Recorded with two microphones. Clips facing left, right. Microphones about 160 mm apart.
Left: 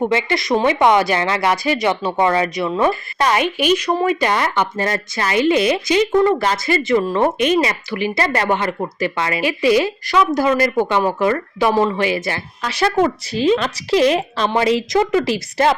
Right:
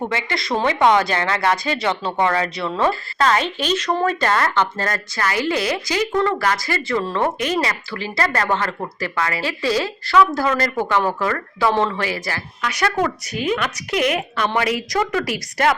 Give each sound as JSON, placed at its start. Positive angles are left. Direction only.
{"t": 0.1, "sound": "speech", "side_deg": 20}